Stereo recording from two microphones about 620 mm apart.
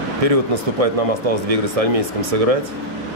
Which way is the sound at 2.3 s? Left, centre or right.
Right.